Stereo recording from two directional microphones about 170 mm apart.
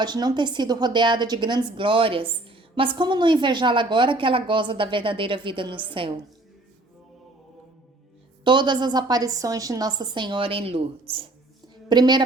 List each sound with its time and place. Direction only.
0.0 s a woman's voice: 25° right (ahead or behind)
8.4 s a woman's voice: 25° right (ahead or behind)